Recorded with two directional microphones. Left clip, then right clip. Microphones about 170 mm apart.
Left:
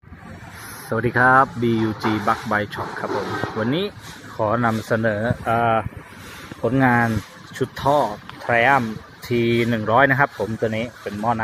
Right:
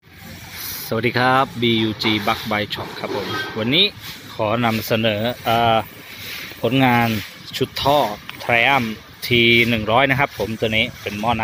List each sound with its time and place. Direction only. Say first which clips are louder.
0.8 s speech: left 1 dB; 15° right (ahead or behind)
7.5 s speech: right 2 dB; 10° right (ahead or behind)
8.5 s speech: right 1 dB; 25° right (ahead or behind)
9.3 s speech: right 6 dB; 25° left (ahead or behind)
9.7 s speech: even; 15° right (ahead or behind)